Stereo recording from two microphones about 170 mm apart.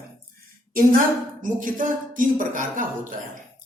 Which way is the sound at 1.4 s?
50° right (ahead or behind).